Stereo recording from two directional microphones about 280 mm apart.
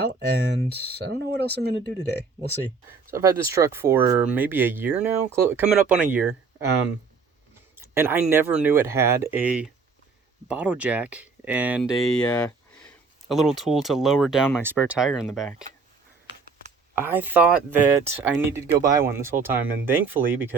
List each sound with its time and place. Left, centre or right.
0.0 s speech: right
3.2 s speech: centre
7.8 s speech: centre
17.0 s speech: centre